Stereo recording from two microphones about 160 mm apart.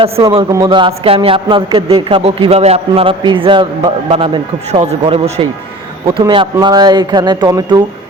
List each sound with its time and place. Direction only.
0.0 s speech: 30° right (ahead or behind)